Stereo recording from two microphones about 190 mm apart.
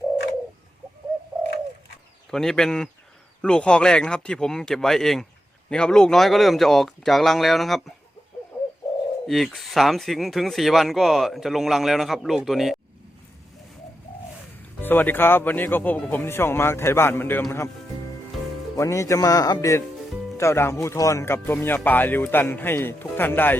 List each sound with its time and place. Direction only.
2.3 s speech: centre (ahead or behind)
9.2 s speech: centre (ahead or behind)
14.8 s speech: 10° left (ahead or behind)
18.8 s speech: 15° left (ahead or behind)